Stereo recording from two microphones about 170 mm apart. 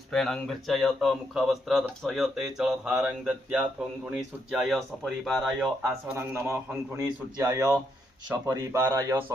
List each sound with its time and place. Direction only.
0.1 s speech: 5° left (ahead or behind)
5.8 s speech: 15° right (ahead or behind)